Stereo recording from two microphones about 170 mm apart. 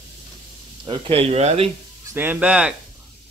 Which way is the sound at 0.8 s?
30° right (ahead or behind).